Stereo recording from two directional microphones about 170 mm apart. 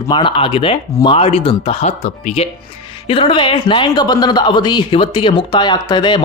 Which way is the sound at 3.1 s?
30° left (ahead or behind).